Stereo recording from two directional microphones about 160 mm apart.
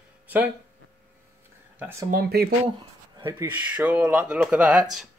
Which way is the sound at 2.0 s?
70° right (ahead or behind).